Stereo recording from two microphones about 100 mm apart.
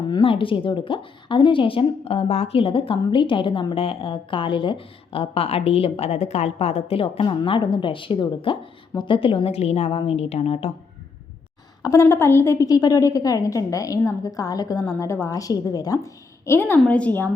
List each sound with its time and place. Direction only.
0.1 s a woman's voice: 60° left (ahead or behind)
3.0 s a woman's voice: 55° left (ahead or behind)
3.8 s speech: 65° left (ahead or behind); by 10.7 s 85° left
11.8 s a woman's voice: 30° left (ahead or behind)
16.6 s a woman's voice: 20° left (ahead or behind)